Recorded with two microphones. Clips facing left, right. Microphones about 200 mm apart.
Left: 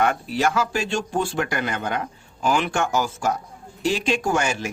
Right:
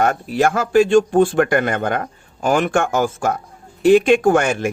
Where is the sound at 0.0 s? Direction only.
45° right (ahead or behind).